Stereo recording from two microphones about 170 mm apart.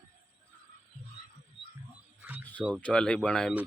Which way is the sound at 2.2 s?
10° right (ahead or behind).